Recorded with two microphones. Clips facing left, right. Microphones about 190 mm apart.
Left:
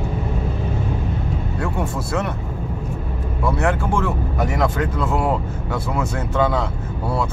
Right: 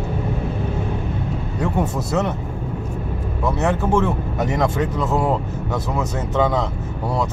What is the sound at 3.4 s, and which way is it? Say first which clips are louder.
Speech: even; 20° right (ahead or behind).